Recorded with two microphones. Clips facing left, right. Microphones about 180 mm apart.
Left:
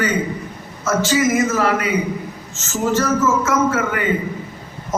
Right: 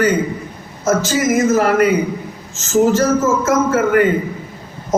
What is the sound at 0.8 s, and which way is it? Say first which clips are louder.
A man's voice: right 2 dB; 40° right (ahead or behind).